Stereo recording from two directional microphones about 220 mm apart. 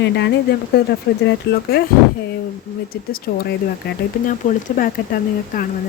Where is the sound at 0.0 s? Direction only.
50° left (ahead or behind).